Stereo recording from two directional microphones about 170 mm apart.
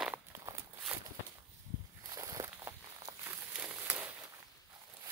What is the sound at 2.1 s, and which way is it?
Walk, 20° right (ahead or behind).